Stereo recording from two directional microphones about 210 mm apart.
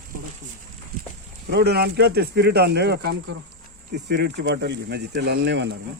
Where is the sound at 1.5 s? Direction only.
50° right (ahead or behind).